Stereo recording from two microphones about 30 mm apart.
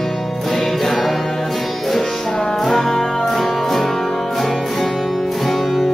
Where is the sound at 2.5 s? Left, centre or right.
Centre.